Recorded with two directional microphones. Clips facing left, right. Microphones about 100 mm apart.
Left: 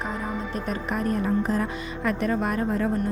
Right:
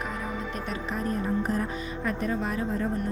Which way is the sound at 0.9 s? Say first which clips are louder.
Left 4 dB; 70° left (ahead or behind).